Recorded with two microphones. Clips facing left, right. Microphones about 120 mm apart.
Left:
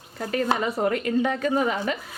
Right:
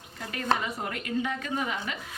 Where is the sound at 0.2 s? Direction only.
40° left (ahead or behind).